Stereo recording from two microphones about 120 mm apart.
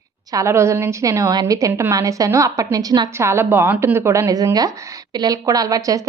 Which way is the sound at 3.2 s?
20° right (ahead or behind).